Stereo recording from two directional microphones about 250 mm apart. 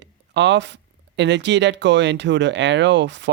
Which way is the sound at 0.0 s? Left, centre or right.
Right.